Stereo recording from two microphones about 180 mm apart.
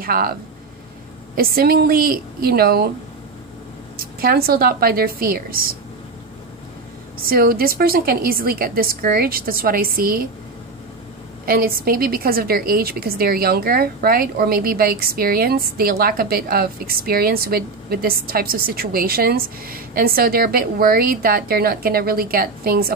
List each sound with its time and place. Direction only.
0.0 s speech: 55° right (ahead or behind)
1.3 s a woman's voice: 55° right (ahead or behind)
4.2 s a woman's voice: 60° right (ahead or behind)
7.2 s a woman's voice: 55° right (ahead or behind)
11.4 s a woman's voice: 55° right (ahead or behind)